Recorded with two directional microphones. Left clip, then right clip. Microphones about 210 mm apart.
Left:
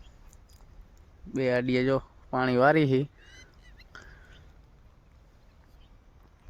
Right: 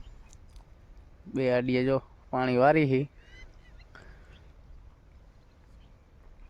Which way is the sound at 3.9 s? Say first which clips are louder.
Left 4 dB; 10° left (ahead or behind).